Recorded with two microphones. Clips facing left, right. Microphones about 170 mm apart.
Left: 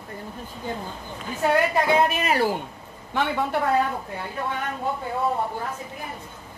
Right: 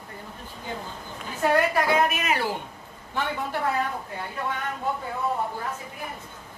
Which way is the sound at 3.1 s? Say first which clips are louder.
Left 5 dB; 75° left (ahead or behind).